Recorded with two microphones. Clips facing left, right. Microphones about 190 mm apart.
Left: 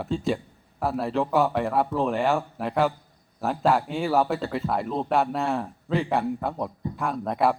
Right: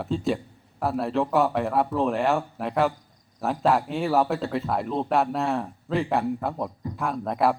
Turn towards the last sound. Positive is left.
turn(degrees=0)  # may be behind; listen again after turning